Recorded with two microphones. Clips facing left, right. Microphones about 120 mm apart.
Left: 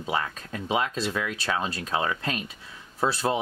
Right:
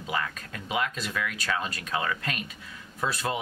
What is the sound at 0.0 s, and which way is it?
Speech, 30° left (ahead or behind).